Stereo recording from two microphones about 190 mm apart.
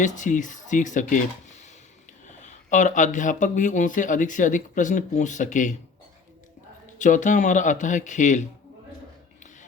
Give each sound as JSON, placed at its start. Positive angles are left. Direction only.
{"t": 0.0, "sound": "speech", "side_deg": 40}
{"t": 2.2, "sound": "speech", "side_deg": 40}
{"t": 7.0, "sound": "speech", "side_deg": 40}